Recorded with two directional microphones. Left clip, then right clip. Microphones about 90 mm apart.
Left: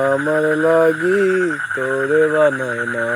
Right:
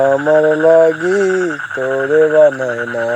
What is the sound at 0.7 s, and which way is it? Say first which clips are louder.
Speech: right 3 dB; 20° left (ahead or behind).